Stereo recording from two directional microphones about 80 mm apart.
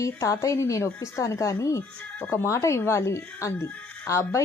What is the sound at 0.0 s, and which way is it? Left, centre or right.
Speech, left.